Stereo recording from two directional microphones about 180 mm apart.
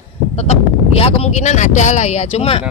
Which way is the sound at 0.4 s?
35° left (ahead or behind).